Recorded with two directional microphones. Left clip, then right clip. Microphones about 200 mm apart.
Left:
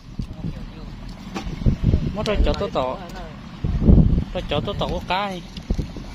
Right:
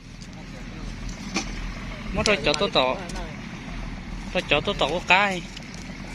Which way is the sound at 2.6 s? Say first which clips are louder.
Right 2 dB; 5° left (ahead or behind).